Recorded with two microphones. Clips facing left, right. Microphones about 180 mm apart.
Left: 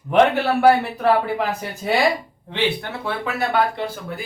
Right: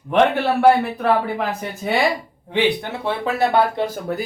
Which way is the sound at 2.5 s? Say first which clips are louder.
Right 4 dB; 20° right (ahead or behind).